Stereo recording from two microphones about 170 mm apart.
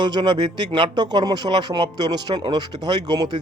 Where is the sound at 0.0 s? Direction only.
25° right (ahead or behind).